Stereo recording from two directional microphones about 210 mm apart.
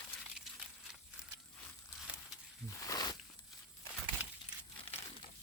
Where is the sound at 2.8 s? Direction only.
15° left (ahead or behind).